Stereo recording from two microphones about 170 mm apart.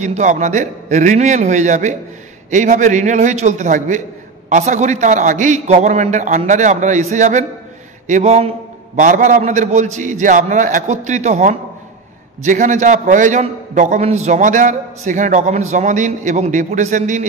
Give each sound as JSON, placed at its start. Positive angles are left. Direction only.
{"t": 0.0, "sound": "a man's voice", "side_deg": -45}